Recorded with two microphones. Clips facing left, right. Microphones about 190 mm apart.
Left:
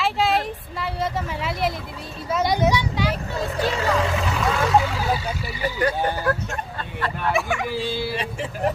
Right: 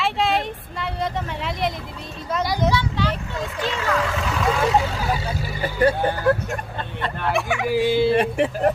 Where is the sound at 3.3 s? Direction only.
40° left (ahead or behind).